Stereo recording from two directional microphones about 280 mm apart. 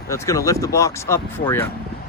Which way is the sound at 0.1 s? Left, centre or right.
Centre.